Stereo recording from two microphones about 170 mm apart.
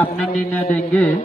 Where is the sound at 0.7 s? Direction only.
5° left (ahead or behind).